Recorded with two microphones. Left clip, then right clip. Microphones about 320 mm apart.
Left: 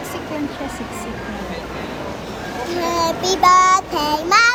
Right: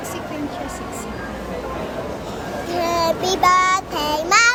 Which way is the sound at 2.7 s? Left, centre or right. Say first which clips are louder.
Even; centre.